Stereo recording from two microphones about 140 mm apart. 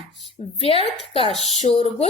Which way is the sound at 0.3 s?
45° left (ahead or behind).